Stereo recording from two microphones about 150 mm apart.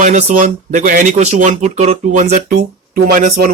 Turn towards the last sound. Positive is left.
turn(degrees=-85)